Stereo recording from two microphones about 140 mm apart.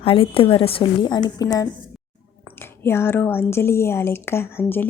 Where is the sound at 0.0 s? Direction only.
40° left (ahead or behind).